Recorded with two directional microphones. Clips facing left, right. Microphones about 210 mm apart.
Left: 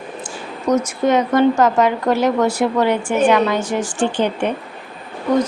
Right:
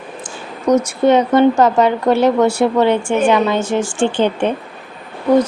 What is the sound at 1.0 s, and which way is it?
Speech, 30° right (ahead or behind).